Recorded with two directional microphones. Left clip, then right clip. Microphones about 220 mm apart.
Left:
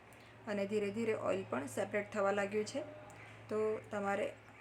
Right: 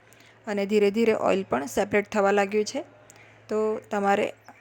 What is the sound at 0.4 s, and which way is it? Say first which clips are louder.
A woman's voice: right 14 dB; 35° right (ahead or behind).